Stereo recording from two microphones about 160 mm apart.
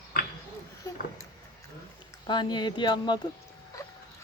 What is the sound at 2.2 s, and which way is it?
Speech, 30° left (ahead or behind).